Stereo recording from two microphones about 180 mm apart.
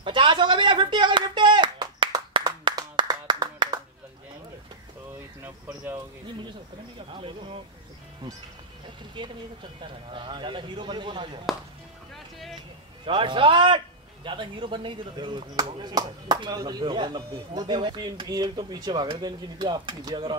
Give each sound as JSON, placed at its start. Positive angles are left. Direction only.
{"t": 0.0, "sound": "a sound", "side_deg": -25}
{"t": 5.4, "sound": "speech", "side_deg": -15}
{"t": 7.2, "sound": "speech", "side_deg": -30}
{"t": 9.2, "sound": "speech", "side_deg": -25}
{"t": 11.5, "sound": "speech", "side_deg": 0}
{"t": 13.0, "sound": "speech", "side_deg": -30}